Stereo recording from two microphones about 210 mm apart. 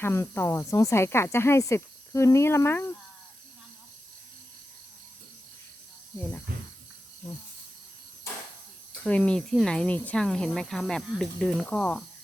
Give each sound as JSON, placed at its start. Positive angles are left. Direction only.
{"t": 0.0, "sound": "speech", "side_deg": 10}
{"t": 6.5, "sound": "speech", "side_deg": -45}
{"t": 9.0, "sound": "speech", "side_deg": 5}